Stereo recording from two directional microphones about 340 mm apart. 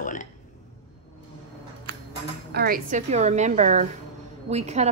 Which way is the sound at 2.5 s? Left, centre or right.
Right.